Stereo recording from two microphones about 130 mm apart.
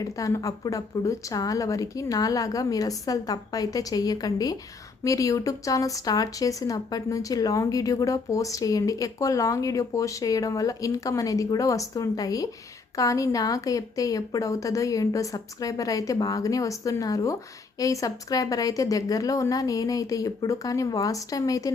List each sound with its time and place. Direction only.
0.0 s speech: 25° left (ahead or behind)